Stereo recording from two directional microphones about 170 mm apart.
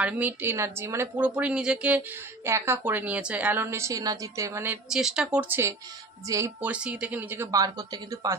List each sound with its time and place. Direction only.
0.0 s speech: 10° right (ahead or behind)
4.8 s speech: 5° right (ahead or behind); by 8.4 s 20° right (ahead or behind)